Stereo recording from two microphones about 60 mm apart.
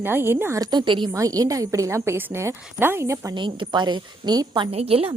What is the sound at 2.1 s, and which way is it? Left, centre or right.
A woman's voice, right.